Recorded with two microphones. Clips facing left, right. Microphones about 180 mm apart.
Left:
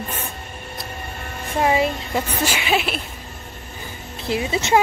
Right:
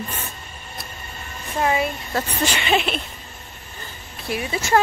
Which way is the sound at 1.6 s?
25° left (ahead or behind).